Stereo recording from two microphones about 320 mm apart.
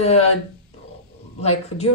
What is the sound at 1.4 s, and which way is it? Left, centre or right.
Speech, centre.